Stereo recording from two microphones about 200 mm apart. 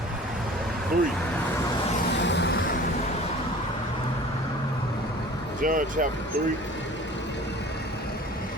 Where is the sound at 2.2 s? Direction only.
60° left (ahead or behind).